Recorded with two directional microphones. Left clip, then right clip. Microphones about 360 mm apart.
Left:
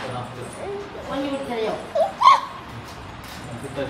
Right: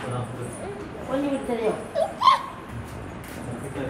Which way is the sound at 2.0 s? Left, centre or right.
Centre.